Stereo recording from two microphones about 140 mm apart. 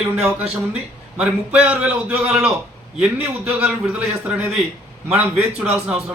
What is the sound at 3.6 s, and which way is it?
A man's voice, 10° right (ahead or behind).